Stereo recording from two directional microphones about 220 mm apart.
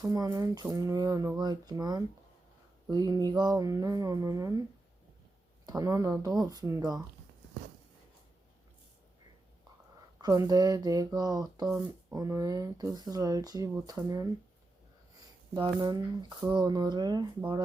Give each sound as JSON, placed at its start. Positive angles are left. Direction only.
{"t": 0.0, "sound": "speech", "side_deg": -15}
{"t": 5.6, "sound": "speech", "side_deg": -15}
{"t": 10.2, "sound": "speech", "side_deg": -15}